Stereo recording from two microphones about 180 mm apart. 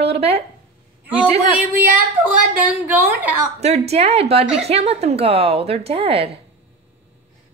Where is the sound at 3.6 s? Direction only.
35° right (ahead or behind).